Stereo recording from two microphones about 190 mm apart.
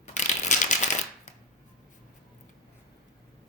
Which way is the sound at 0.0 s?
40° left (ahead or behind).